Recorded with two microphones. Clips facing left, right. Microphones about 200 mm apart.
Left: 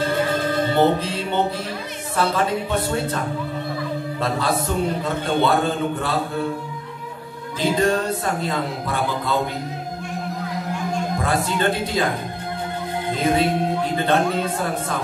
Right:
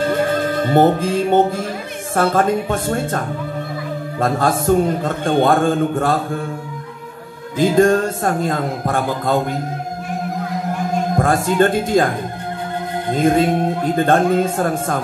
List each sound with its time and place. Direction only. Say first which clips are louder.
0.7 s a man's voice: right 7 dB; 45° right (ahead or behind)
7.5 s a man's voice: right 6 dB; 45° right (ahead or behind)
11.1 s a man's voice: right 9 dB; 45° right (ahead or behind)
13.2 s a man's voice: right 5 dB; 45° right (ahead or behind)